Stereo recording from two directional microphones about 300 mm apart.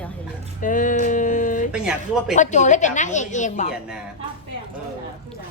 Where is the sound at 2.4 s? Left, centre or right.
Left.